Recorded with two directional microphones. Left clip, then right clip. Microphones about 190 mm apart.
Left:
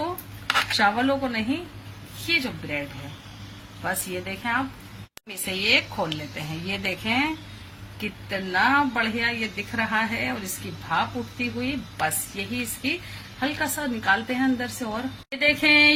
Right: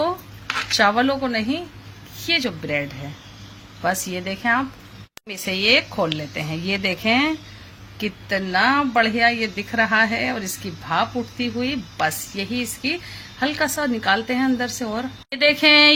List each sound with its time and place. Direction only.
0.8 s speech: 45° right (ahead or behind)
3.8 s speech: 50° right (ahead or behind)